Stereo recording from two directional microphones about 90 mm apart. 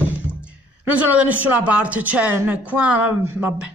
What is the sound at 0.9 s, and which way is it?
A woman's voice, 15° right (ahead or behind).